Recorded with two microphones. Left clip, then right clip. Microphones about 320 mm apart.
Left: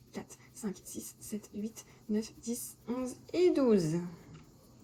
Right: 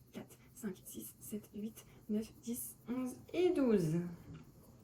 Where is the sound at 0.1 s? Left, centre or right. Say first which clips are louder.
Left 7 dB; centre.